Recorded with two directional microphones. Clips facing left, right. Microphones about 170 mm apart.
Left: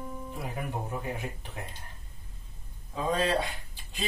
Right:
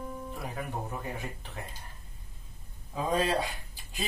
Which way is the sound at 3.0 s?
10° right (ahead or behind).